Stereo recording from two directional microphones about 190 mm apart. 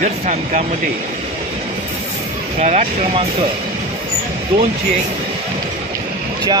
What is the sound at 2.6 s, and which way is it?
Speech, 35° right (ahead or behind).